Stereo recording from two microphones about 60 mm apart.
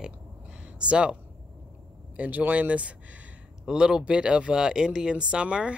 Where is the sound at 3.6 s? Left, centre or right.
Centre.